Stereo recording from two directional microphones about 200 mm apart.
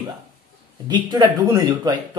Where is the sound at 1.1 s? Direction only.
20° right (ahead or behind).